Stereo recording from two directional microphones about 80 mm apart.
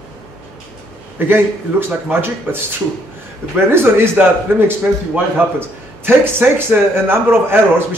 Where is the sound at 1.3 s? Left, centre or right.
Right.